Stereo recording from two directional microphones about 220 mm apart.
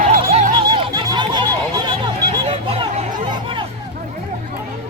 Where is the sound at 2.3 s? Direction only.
25° right (ahead or behind).